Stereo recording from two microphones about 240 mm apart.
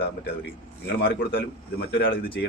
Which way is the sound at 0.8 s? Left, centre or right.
Left.